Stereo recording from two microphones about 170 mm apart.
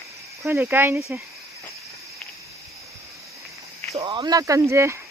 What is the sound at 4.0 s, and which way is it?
Speech, 25° right (ahead or behind).